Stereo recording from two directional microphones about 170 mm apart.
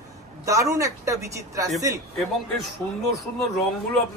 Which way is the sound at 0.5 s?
20° right (ahead or behind).